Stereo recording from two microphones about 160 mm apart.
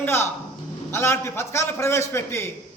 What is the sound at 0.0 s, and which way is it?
A man's voice, 15° left (ahead or behind).